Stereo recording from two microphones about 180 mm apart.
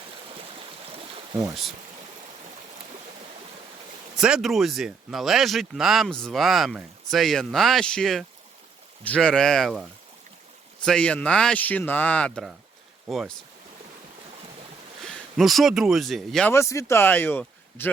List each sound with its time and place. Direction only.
1.3 s speech: 20° right (ahead or behind)
4.2 s speech: centre (ahead or behind)
10.8 s speech: 5° left (ahead or behind)
15.0 s speech: centre (ahead or behind)
16.5 s speech: 15° left (ahead or behind)